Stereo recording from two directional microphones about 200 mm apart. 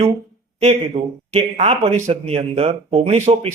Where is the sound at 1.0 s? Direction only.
30° right (ahead or behind).